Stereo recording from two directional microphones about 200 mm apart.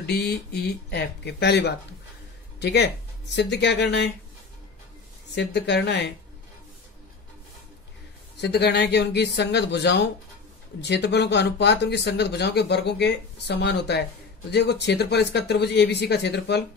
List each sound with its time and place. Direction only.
0.0 s speech: 55° left (ahead or behind)
5.3 s speech: 60° left (ahead or behind)
8.4 s speech: 55° left (ahead or behind)